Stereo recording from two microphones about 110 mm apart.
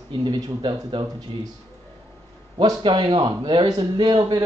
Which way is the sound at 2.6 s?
45° right (ahead or behind).